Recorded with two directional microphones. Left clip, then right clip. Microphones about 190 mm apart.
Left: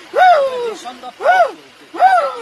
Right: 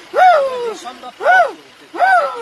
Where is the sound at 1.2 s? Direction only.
15° left (ahead or behind).